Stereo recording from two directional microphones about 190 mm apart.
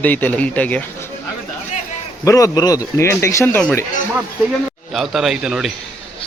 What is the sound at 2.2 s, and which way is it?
A man's voice, 15° left (ahead or behind).